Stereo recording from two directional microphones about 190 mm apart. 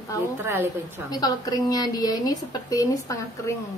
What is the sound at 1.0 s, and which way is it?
A woman's voice, 20° left (ahead or behind).